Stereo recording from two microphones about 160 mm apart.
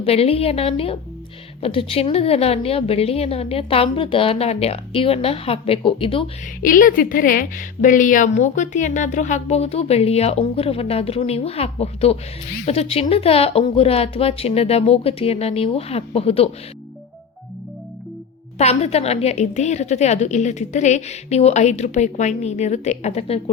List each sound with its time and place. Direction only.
0.0 s a woman's voice: 40° left (ahead or behind)
6.6 s a woman's voice: 60° left (ahead or behind); by 16.5 s 40° left (ahead or behind)
18.5 s a woman's voice: 40° left (ahead or behind)